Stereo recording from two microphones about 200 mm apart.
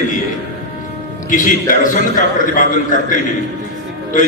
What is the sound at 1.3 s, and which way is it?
Mantra, 40° left (ahead or behind).